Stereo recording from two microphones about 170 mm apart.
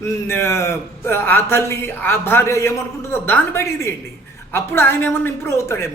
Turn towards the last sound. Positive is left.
turn(degrees=15)  # may be behind; listen again after turning